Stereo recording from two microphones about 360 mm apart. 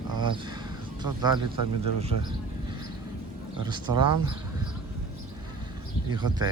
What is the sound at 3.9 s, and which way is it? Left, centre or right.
Speech, right.